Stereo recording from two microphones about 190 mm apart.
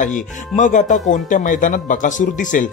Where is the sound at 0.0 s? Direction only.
40° left (ahead or behind).